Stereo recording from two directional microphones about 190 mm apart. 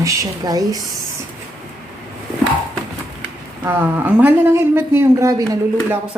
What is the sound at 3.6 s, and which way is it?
Speech, 10° right (ahead or behind).